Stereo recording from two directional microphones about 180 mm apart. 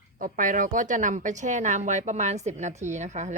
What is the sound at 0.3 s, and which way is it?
Speech, 45° right (ahead or behind).